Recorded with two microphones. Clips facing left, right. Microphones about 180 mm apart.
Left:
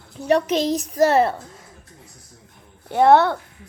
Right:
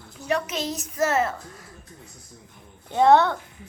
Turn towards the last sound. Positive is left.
turn(degrees=10)  # may be behind; listen again after turning